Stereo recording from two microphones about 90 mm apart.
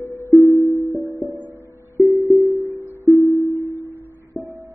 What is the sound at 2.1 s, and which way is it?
Music, 35° right (ahead or behind).